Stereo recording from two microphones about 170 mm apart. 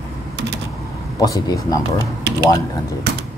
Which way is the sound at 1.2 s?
20° left (ahead or behind).